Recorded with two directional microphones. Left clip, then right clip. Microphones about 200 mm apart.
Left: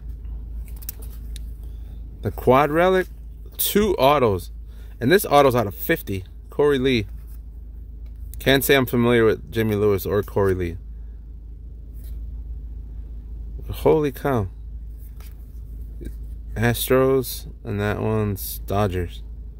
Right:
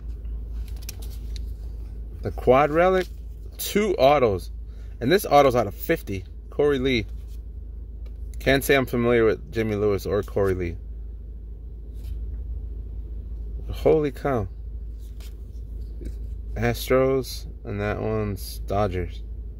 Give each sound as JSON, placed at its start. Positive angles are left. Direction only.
{"t": 2.2, "sound": "speech", "side_deg": 25}
{"t": 8.4, "sound": "speech", "side_deg": 25}
{"t": 13.7, "sound": "speech", "side_deg": 30}
{"t": 16.5, "sound": "speech", "side_deg": 30}